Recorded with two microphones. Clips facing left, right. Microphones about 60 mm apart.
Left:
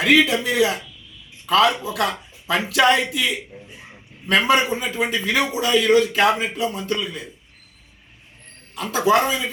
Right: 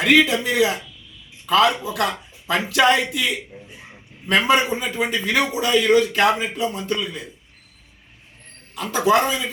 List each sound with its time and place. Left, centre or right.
0.0 s a man's voice: centre
9.2 s speech: centre